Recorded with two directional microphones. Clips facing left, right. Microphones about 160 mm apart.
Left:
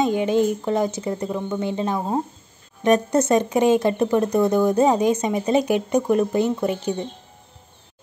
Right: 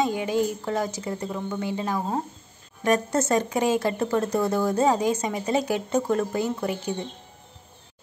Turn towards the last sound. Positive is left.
turn(degrees=20)  # may be behind; listen again after turning